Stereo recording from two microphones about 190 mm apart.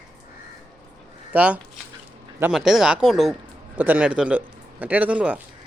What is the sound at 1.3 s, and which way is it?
Speech, 5° right (ahead or behind).